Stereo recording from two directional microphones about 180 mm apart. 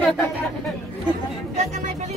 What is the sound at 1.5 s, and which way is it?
Speech, 40° right (ahead or behind).